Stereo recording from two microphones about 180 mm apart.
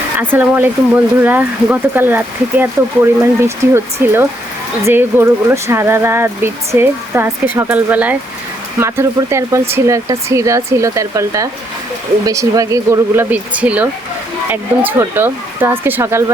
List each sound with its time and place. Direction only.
0.2 s speech: 10° right (ahead or behind)
14.8 s speech: 10° right (ahead or behind)